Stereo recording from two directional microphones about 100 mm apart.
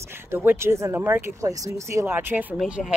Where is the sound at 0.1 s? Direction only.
20° right (ahead or behind).